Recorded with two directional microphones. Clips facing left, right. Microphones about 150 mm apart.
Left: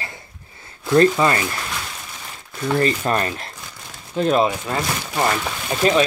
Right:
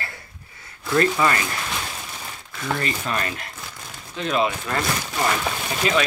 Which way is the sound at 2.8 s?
35° left (ahead or behind).